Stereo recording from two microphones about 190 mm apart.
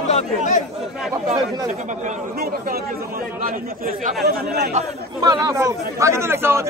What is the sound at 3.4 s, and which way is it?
Speech, 45° right (ahead or behind).